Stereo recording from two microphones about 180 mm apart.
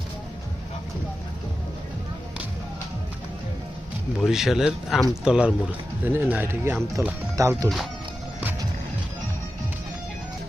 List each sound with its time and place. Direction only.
4.2 s speech: centre (ahead or behind); by 7.7 s 20° right (ahead or behind)